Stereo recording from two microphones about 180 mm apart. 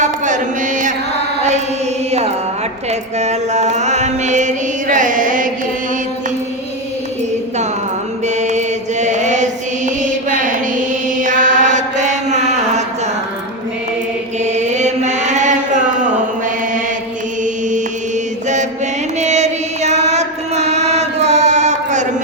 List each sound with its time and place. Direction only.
0.0 s music: 45° right (ahead or behind)
3.2 s chant: 40° right (ahead or behind)
8.4 s mantra: 40° right (ahead or behind)
14.4 s chant: 40° right (ahead or behind)
17.4 s chant: 45° right (ahead or behind)
19.2 s chant: 40° right (ahead or behind)